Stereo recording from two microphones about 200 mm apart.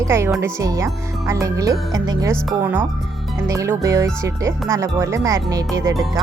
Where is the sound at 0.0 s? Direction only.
15° right (ahead or behind).